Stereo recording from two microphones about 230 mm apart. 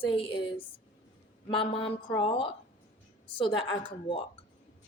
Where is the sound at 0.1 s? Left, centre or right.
Left.